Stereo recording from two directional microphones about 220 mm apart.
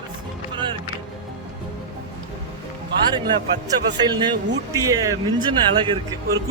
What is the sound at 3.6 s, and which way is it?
Speech, 20° right (ahead or behind).